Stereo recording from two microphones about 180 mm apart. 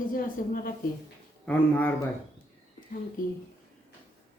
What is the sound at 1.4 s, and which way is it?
Speech, 10° left (ahead or behind).